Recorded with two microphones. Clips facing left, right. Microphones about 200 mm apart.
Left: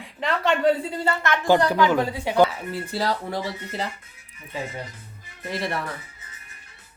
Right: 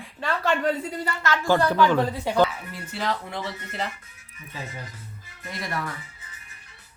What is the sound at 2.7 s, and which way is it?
Speech, 35° left (ahead or behind).